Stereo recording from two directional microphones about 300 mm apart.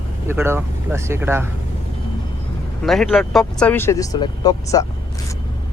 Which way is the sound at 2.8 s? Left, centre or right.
Centre.